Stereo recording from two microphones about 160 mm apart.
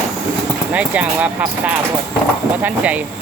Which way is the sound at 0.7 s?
10° right (ahead or behind).